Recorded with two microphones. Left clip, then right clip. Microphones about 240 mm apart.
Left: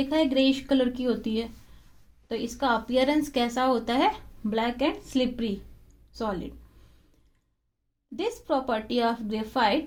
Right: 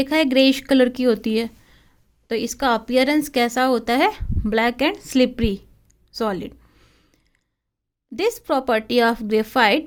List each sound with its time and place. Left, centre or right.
0.0 s speech: right
8.1 s speech: right